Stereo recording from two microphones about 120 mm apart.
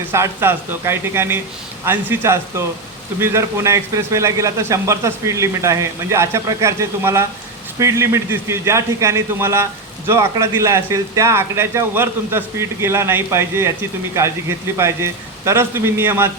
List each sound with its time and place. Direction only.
0.1 s speech: 20° right (ahead or behind)